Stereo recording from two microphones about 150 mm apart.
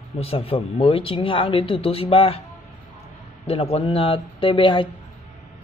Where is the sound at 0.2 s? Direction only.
40° left (ahead or behind).